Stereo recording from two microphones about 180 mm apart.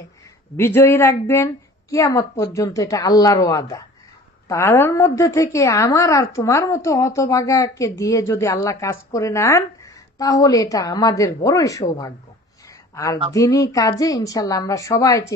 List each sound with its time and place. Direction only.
0.6 s a woman's voice: 15° left (ahead or behind)